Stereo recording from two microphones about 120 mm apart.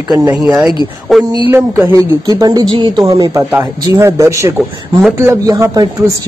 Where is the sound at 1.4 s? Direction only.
20° right (ahead or behind).